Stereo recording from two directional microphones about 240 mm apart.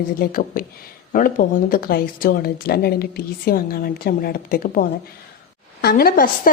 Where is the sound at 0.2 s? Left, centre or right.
Left.